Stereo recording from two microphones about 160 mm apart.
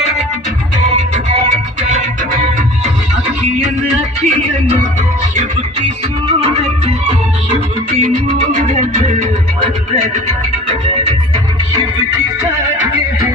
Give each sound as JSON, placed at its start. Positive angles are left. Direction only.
{"t": 1.3, "sound": "music", "side_deg": -45}
{"t": 6.2, "sound": "music", "side_deg": -35}
{"t": 7.9, "sound": "music", "side_deg": -45}